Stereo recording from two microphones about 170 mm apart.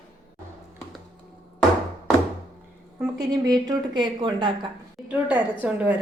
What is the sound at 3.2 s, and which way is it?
A woman's voice, 20° right (ahead or behind).